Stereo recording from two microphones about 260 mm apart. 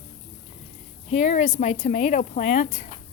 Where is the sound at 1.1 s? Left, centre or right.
Left.